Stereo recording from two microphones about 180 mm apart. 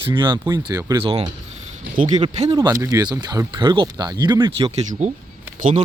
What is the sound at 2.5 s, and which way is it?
Speech, 20° right (ahead or behind).